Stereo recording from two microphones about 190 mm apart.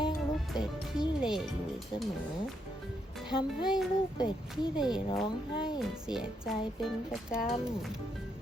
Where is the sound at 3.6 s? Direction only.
5° right (ahead or behind).